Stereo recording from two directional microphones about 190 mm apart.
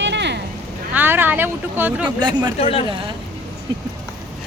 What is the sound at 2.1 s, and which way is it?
Speech, 20° right (ahead or behind).